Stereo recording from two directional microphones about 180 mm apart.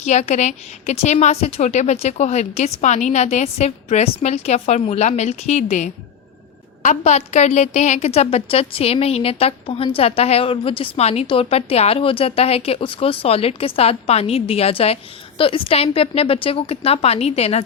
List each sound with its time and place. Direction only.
0.0 s a woman's voice: 40° left (ahead or behind)